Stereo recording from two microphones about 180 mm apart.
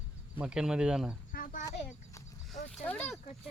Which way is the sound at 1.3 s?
50° left (ahead or behind).